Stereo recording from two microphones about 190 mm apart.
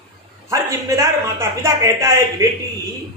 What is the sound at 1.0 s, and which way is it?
A man's voice, 15° right (ahead or behind).